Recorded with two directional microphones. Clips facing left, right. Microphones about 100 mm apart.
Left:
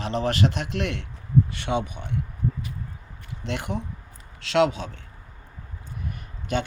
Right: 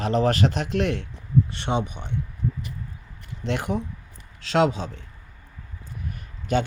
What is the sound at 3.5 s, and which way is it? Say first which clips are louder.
Speech: right 4 dB; 45° right (ahead or behind).